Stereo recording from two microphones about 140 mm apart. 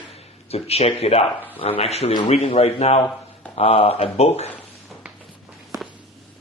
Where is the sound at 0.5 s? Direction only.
45° left (ahead or behind).